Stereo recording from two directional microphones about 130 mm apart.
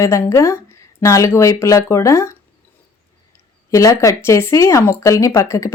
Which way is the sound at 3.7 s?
25° left (ahead or behind).